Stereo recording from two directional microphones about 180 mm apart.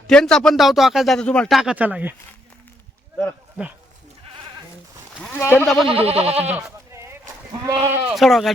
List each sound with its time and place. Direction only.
0.1 s a man's voice: 5° left (ahead or behind)
5.2 s speech: 10° left (ahead or behind)
5.6 s a man's voice: centre (ahead or behind)
5.9 s goat: 35° right (ahead or behind)
6.6 s sheep: 15° right (ahead or behind)
7.6 s speech: 15° right (ahead or behind)
8.1 s a man's voice: centre (ahead or behind)